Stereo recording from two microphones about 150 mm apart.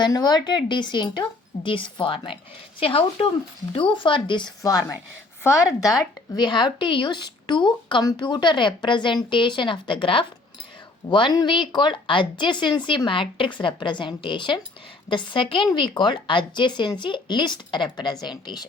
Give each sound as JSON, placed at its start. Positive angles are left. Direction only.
{"t": 0.0, "sound": "speech", "side_deg": 30}
{"t": 5.4, "sound": "a woman's voice", "side_deg": 20}